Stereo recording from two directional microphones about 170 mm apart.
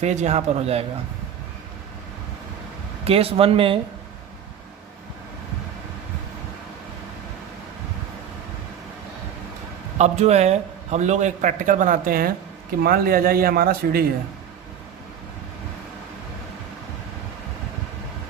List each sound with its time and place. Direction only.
0.0 s a man's voice: 40° right (ahead or behind)
3.0 s a man's voice: 35° right (ahead or behind)
10.0 s a man's voice: 40° right (ahead or behind); by 14.0 s 60° right (ahead or behind)